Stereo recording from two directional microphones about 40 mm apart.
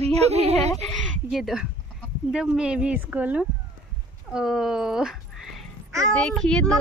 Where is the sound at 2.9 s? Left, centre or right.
Right.